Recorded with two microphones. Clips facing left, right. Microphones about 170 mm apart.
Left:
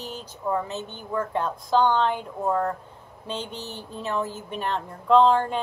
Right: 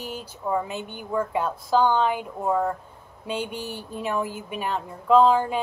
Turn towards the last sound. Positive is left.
turn(degrees=-5)  # may be behind; listen again after turning